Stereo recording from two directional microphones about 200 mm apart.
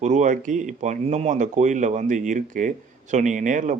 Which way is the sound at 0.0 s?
35° right (ahead or behind).